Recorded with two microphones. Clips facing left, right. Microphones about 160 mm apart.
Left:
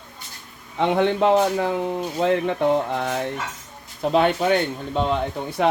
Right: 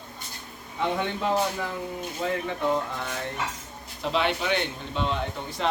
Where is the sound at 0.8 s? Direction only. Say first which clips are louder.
Left 8 dB; 70° left (ahead or behind).